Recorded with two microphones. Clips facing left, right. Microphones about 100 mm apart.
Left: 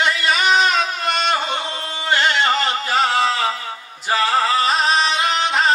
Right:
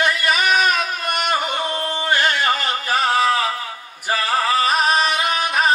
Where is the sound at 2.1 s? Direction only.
20° left (ahead or behind).